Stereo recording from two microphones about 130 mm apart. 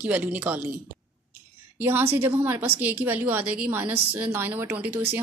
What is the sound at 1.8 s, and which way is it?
A woman's voice, 15° right (ahead or behind).